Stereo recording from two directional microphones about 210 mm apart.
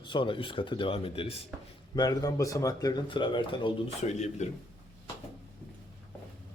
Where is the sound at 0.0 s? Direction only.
25° left (ahead or behind).